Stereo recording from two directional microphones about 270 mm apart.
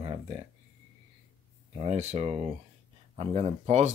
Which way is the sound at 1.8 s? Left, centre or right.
Right.